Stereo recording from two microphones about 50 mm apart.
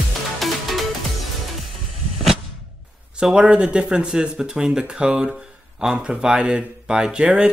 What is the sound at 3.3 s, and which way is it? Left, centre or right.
Speech, right.